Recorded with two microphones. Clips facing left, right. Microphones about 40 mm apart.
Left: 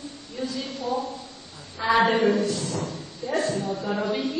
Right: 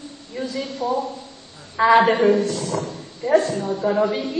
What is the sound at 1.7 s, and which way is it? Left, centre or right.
A woman's voice, right.